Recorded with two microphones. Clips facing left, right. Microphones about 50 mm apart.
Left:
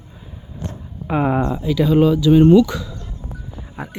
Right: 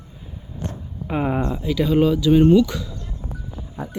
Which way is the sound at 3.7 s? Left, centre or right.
Left.